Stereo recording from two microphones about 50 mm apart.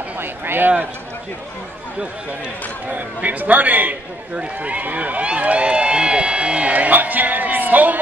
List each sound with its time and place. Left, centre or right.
0.2 s a man's voice: right
2.9 s a man's voice: right